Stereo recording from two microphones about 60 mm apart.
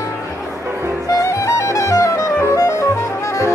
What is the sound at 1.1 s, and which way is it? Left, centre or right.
Music, left.